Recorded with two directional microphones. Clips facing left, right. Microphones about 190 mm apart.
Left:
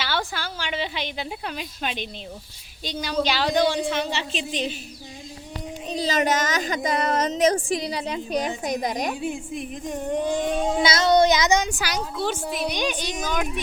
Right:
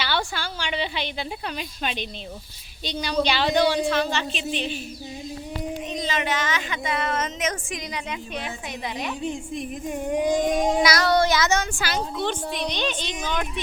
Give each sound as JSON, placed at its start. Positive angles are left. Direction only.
{"t": 0.0, "sound": "a woman's voice", "side_deg": 5}
{"t": 3.1, "sound": "speech", "side_deg": 5}
{"t": 3.8, "sound": "speech", "side_deg": 15}
{"t": 4.3, "sound": "a woman's voice", "side_deg": 35}
{"t": 5.9, "sound": "a woman's voice", "side_deg": 35}
{"t": 9.2, "sound": "speech", "side_deg": 10}
{"t": 9.8, "sound": "speech", "side_deg": -10}
{"t": 10.8, "sound": "child singing", "side_deg": 20}
{"t": 11.7, "sound": "speech", "side_deg": 5}